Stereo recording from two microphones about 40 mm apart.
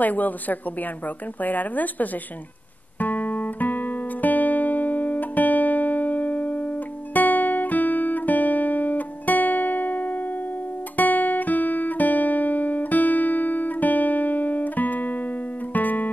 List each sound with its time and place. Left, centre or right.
0.0 s a woman's voice: left
3.0 s guitar: left